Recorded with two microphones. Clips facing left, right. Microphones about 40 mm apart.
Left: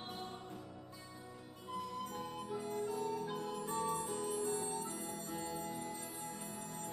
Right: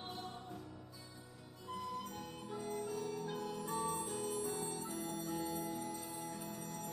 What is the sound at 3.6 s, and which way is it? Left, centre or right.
Music, centre.